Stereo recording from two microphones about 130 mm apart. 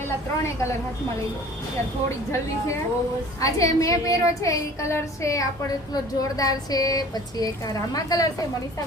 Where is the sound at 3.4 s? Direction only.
25° left (ahead or behind).